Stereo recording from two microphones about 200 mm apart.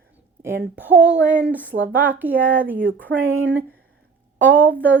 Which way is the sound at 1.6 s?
70° right (ahead or behind).